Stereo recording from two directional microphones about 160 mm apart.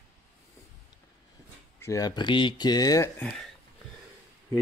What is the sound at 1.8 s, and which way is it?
Speech, 20° left (ahead or behind).